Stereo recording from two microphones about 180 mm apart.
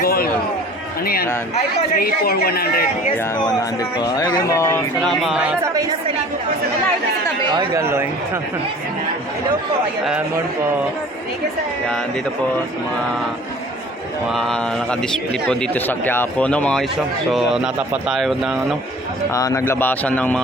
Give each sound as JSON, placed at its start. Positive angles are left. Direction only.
{"t": 0.0, "sound": "a sound", "side_deg": 55}
{"t": 1.0, "sound": "a woman's voice", "side_deg": 55}
{"t": 3.4, "sound": "speech", "side_deg": 25}
{"t": 4.9, "sound": "a man's voice", "side_deg": 0}
{"t": 7.5, "sound": "speech", "side_deg": -15}
{"t": 14.3, "sound": "a man's voice", "side_deg": 0}
{"t": 19.3, "sound": "a man's voice", "side_deg": 20}